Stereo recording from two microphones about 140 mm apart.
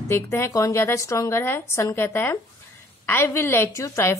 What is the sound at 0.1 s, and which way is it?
A woman's voice, 20° left (ahead or behind).